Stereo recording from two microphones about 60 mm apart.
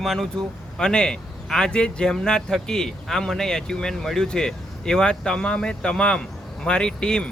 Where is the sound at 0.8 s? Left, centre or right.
Centre.